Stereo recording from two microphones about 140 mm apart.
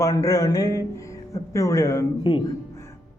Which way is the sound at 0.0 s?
25° left (ahead or behind).